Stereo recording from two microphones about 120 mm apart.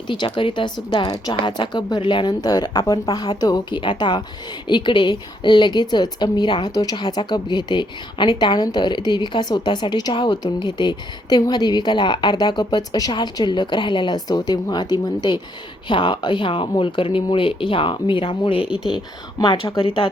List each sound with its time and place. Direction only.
0.1 s a woman's voice: 45° left (ahead or behind)
18.9 s speech: 35° left (ahead or behind)